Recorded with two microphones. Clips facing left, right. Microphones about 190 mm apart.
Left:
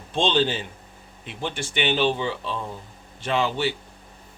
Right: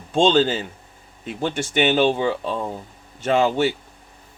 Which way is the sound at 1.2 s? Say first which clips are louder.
Right 6 dB; 45° right (ahead or behind).